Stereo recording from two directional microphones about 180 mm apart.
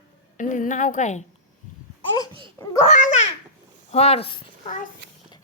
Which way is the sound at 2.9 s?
45° left (ahead or behind).